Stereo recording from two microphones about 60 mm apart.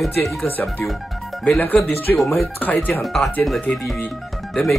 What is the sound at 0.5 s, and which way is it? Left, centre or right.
Speech, left.